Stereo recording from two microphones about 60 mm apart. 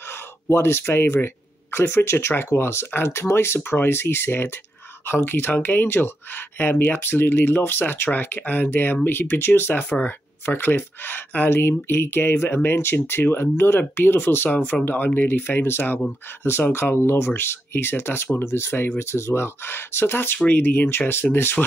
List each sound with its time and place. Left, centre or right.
0.1 s speech: left
9.8 s speech: left
10.4 s speech: left